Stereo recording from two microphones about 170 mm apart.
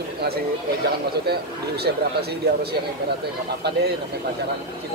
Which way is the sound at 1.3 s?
70° right (ahead or behind).